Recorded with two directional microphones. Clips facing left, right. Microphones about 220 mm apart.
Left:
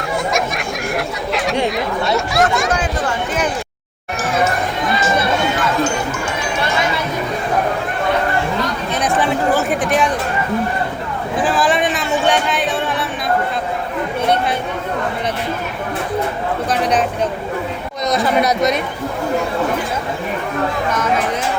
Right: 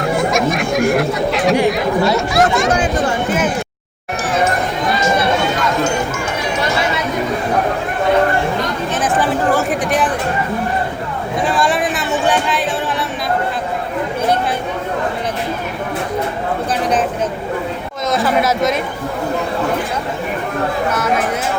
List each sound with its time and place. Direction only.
0.0 s snicker: centre (ahead or behind)
1.7 s speech: centre (ahead or behind)
9.0 s chatter: centre (ahead or behind)
11.3 s a sound: centre (ahead or behind)
18.1 s a man's voice: centre (ahead or behind)